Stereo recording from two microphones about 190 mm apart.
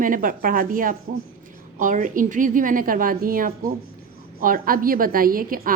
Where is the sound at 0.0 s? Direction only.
45° right (ahead or behind).